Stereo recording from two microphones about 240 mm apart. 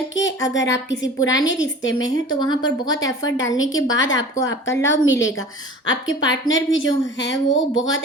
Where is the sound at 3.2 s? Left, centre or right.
Left.